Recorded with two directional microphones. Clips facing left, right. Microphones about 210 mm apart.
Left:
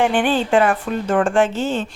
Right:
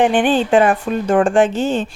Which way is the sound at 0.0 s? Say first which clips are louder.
Right 3 dB; 15° right (ahead or behind).